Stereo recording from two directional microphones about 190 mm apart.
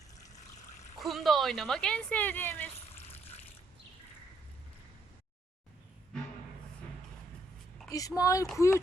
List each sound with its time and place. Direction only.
0.9 s speech: centre (ahead or behind)
7.9 s a woman's voice: 20° left (ahead or behind)